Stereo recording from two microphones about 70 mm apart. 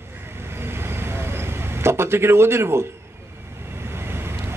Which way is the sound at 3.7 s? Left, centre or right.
Right.